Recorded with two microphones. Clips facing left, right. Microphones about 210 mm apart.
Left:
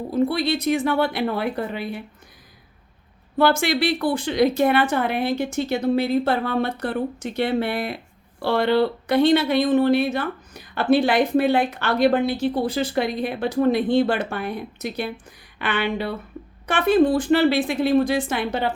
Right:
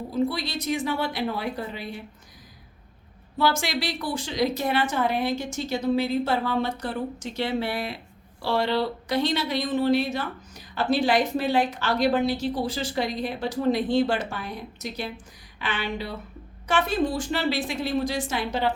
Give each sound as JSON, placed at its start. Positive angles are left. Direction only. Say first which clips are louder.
{"t": 0.1, "sound": "speech", "louder": "left 6 dB", "side_deg": 60}
{"t": 3.3, "sound": "speech", "louder": "left 6 dB", "side_deg": 60}